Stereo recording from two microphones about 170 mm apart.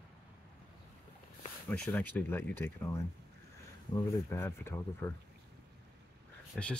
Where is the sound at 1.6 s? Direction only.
5° left (ahead or behind).